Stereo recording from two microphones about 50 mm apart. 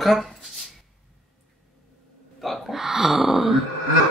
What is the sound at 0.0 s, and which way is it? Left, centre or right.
Speech, centre.